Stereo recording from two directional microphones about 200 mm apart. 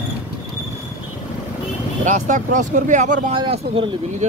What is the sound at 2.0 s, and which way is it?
Speech, 40° right (ahead or behind).